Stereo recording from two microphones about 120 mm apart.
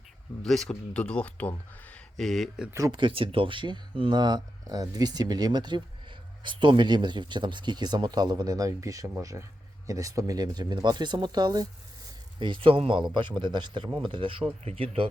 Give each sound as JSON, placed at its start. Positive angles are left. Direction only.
{"t": 0.4, "sound": "speech", "side_deg": 5}
{"t": 2.9, "sound": "speech", "side_deg": -45}
{"t": 12.4, "sound": "speech", "side_deg": -45}